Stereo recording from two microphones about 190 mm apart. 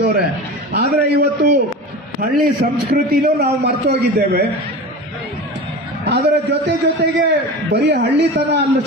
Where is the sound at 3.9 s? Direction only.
55° right (ahead or behind).